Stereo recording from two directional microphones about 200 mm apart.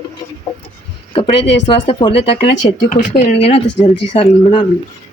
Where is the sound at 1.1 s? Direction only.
30° left (ahead or behind).